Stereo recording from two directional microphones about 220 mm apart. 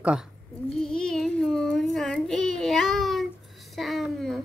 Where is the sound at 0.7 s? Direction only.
5° left (ahead or behind).